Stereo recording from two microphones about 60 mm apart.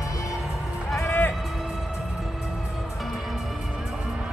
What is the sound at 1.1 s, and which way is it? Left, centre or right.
Music, left.